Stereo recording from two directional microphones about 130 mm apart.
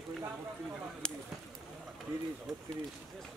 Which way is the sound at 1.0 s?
5° left (ahead or behind).